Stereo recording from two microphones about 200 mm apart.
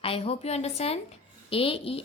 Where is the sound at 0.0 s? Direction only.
30° left (ahead or behind).